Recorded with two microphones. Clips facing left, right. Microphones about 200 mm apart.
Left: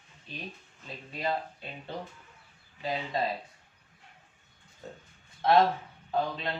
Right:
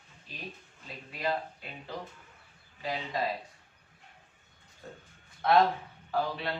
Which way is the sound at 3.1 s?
25° left (ahead or behind).